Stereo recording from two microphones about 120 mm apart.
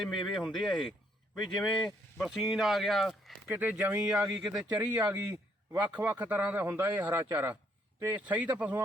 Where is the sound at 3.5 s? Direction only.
15° right (ahead or behind).